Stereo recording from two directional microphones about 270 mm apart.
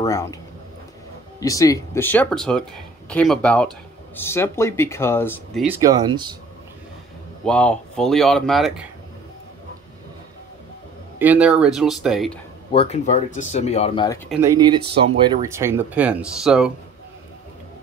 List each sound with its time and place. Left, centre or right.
0.0 s speech: centre
1.4 s speech: centre
5.8 s speech: centre
7.4 s speech: centre
11.1 s speech: centre
12.7 s speech: left
14.3 s speech: centre